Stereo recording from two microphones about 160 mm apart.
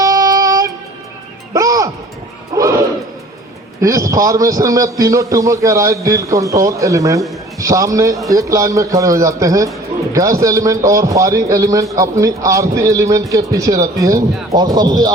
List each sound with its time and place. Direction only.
0.0 s music: 20° right (ahead or behind)
3.8 s a man's voice: 20° right (ahead or behind)